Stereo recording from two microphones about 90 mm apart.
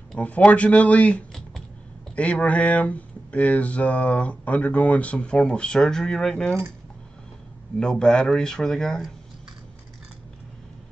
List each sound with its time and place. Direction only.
0.1 s speech: 15° left (ahead or behind)
7.8 s speech: 10° left (ahead or behind)